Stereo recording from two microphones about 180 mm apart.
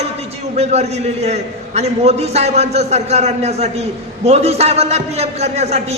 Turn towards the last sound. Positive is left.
turn(degrees=-35)  # may be behind; listen again after turning